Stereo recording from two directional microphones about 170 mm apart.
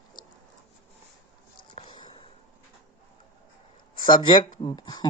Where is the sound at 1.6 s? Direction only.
30° left (ahead or behind).